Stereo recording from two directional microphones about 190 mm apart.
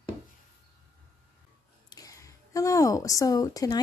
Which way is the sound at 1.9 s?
20° left (ahead or behind).